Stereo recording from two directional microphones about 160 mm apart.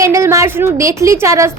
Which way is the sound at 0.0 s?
20° right (ahead or behind).